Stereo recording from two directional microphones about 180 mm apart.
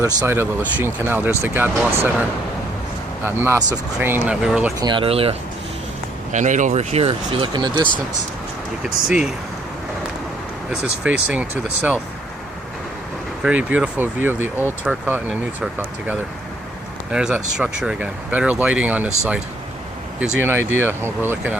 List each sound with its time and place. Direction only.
0.0 s speech: 15° right (ahead or behind)
3.2 s speech: 15° right (ahead or behind)
4.8 s speech: 25° right (ahead or behind)
6.3 s speech: 45° right (ahead or behind); by 7.9 s 25° right (ahead or behind)
9.0 s speech: 5° right (ahead or behind)
10.7 s speech: 5° right (ahead or behind)
13.4 s speech: 10° right (ahead or behind)
20.1 s speech: 10° right (ahead or behind)